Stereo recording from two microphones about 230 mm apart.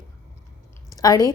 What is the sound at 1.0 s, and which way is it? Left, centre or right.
Speech, centre.